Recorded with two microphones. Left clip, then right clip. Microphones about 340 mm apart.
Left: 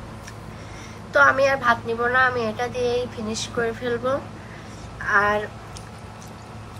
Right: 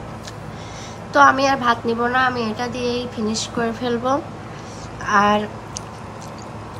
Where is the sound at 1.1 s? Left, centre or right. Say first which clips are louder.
Right 3 dB; centre.